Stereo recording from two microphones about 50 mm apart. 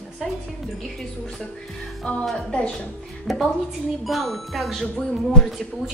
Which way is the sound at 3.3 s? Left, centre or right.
Centre.